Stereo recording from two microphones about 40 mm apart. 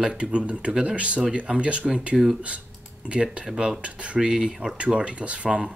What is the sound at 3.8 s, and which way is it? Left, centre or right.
Speech, right.